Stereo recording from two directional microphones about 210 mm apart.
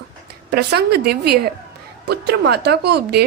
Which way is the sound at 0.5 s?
50° right (ahead or behind).